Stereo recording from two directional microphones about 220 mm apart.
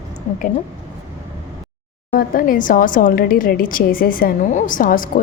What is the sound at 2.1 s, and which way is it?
A woman's voice, 40° left (ahead or behind).